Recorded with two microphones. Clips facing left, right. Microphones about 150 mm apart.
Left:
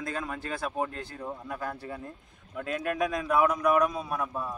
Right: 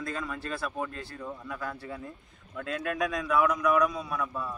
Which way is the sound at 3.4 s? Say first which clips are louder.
Left 1 dB; 45° left (ahead or behind).